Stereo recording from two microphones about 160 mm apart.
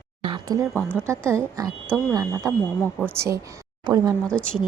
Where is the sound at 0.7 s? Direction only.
5° left (ahead or behind).